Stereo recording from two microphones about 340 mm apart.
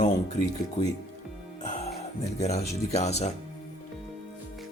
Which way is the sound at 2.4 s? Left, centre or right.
Centre.